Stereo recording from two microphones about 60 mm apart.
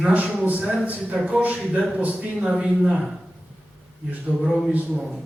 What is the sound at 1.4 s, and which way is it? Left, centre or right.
Speech, centre.